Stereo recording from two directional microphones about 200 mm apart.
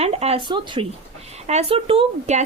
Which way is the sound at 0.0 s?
30° right (ahead or behind).